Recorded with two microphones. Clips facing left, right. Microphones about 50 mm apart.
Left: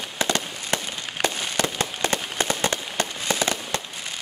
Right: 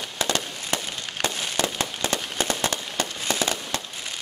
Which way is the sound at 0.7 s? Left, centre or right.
Centre.